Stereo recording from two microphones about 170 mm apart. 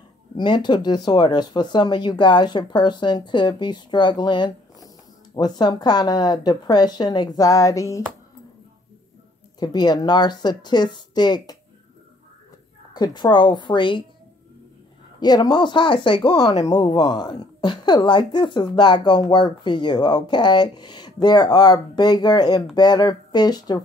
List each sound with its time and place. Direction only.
0.4 s a woman's voice: 25° left (ahead or behind)
9.6 s a woman's voice: 25° left (ahead or behind)
12.9 s a woman's voice: 25° left (ahead or behind)
15.1 s a woman's voice: 25° left (ahead or behind)